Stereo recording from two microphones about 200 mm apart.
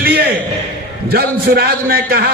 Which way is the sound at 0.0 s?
50° right (ahead or behind).